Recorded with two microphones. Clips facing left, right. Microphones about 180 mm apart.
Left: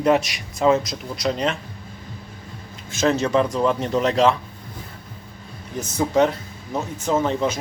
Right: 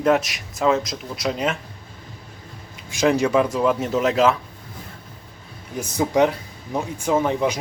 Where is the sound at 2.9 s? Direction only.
15° right (ahead or behind).